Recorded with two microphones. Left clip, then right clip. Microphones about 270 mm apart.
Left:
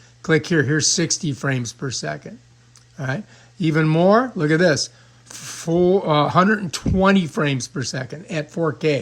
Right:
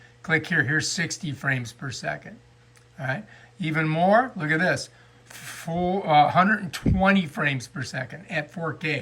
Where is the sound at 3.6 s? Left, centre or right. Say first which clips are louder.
Left 5 dB; centre.